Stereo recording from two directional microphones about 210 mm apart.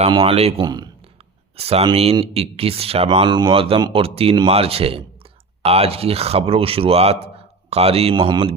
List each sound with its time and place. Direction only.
0.0 s speech: 25° right (ahead or behind)